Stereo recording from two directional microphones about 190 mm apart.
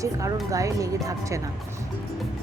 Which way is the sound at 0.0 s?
15° right (ahead or behind).